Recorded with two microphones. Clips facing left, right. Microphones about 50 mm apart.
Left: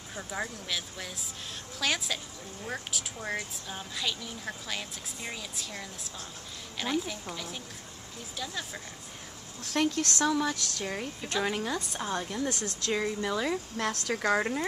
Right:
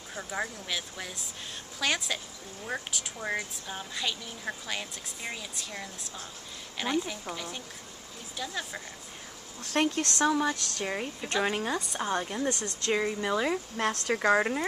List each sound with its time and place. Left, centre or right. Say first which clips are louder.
0.1 s a woman's voice: right 2 dB; centre
7.0 s a woman's voice: right 2 dB; centre
10.0 s a woman's voice: right 1 dB; centre